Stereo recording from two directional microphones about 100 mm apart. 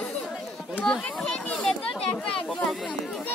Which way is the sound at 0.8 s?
10° left (ahead or behind).